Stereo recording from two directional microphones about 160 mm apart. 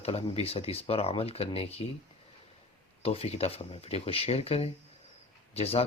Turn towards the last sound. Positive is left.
turn(degrees=40)  # may be behind; listen again after turning